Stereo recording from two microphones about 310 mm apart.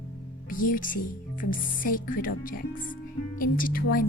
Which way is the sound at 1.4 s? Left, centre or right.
Left.